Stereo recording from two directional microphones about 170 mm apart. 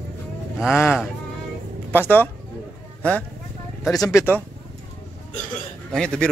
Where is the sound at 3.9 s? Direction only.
20° left (ahead or behind).